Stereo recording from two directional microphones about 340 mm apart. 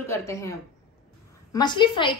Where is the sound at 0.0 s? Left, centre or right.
Centre.